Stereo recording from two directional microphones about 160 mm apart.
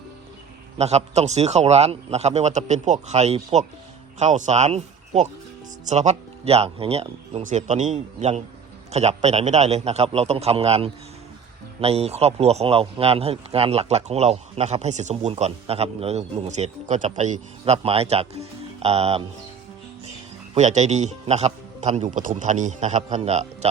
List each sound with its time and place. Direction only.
0.8 s a man's voice: 40° right (ahead or behind)
7.4 s a man's voice: 50° right (ahead or behind)
20.6 s a man's voice: 50° right (ahead or behind)